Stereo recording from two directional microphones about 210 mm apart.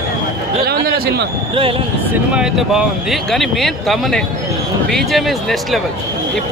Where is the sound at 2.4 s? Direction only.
Centre (ahead or behind).